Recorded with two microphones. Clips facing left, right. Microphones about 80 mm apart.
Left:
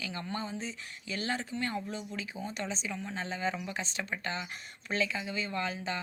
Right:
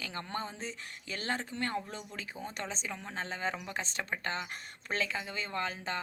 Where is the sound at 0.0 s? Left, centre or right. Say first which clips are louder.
Left 1 dB; right.